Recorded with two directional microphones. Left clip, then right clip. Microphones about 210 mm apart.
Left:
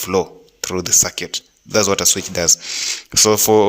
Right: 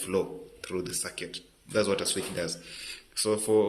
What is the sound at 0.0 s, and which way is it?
Speech, 40° left (ahead or behind).